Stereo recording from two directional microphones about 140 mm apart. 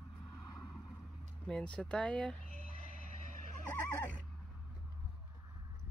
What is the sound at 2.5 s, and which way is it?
Neigh, 65° right (ahead or behind).